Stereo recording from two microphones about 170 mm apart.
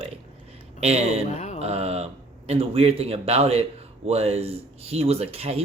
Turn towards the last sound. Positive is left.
turn(degrees=-35)  # may be behind; listen again after turning